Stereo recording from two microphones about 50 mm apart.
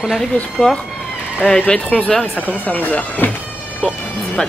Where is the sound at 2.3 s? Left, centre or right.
Left.